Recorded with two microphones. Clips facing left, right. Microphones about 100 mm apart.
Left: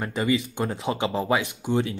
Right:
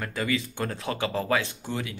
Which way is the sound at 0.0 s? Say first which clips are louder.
Left 4 dB; 25° left (ahead or behind).